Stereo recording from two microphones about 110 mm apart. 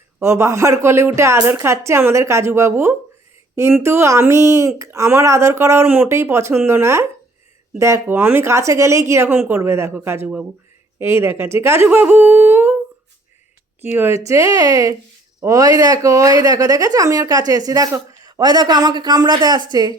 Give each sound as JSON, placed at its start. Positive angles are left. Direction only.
{"t": 0.2, "sound": "speech", "side_deg": -25}
{"t": 11.9, "sound": "humming", "side_deg": -15}
{"t": 13.8, "sound": "speech", "side_deg": -20}